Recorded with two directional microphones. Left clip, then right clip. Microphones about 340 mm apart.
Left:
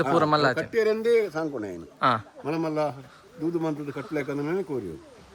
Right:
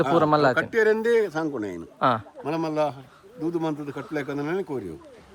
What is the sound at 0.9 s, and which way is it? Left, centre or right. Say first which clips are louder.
Speech: right 1 dB; right.